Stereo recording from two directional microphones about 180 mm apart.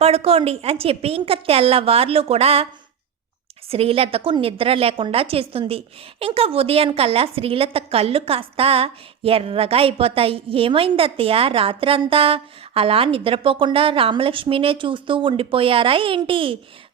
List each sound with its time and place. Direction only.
0.0 s a woman's voice: 35° right (ahead or behind)
3.7 s a woman's voice: 30° right (ahead or behind)